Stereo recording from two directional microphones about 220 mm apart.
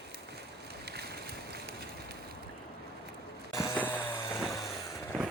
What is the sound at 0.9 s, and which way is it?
Boat, 45° right (ahead or behind).